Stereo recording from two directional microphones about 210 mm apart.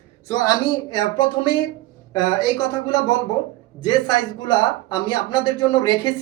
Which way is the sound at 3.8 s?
20° left (ahead or behind).